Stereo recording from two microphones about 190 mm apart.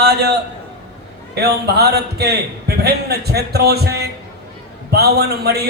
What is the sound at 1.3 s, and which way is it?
A man's voice, 60° right (ahead or behind).